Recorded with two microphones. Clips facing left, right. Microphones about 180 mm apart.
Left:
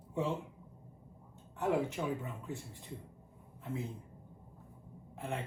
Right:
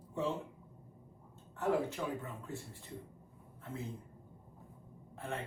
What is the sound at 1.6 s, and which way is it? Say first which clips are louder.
A man's voice: left 1 dB; 15° left (ahead or behind).